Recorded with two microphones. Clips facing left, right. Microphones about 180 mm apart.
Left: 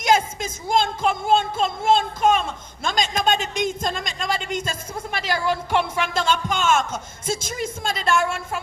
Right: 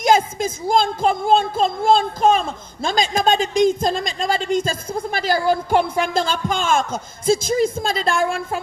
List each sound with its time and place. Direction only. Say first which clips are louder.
0.0 s speech: right 4 dB; 35° right (ahead or behind)